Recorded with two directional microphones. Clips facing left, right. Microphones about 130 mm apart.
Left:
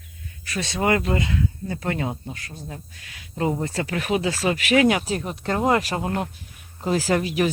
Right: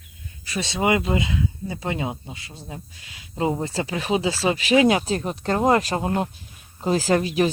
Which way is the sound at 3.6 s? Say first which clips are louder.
Even; 30° right (ahead or behind).